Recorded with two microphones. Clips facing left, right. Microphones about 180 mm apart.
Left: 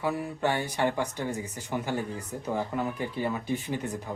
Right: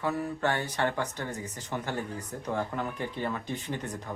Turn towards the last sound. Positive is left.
turn(degrees=10)  # may be behind; listen again after turning